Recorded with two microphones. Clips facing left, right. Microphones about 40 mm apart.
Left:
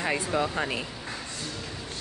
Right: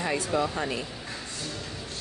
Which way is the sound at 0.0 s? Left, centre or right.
Centre.